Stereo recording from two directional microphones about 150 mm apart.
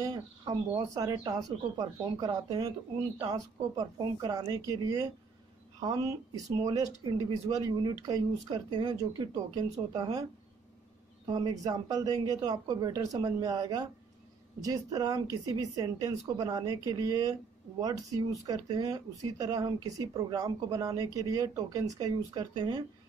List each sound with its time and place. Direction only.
0.0 s speech: 25° right (ahead or behind)
11.2 s speech: 25° right (ahead or behind)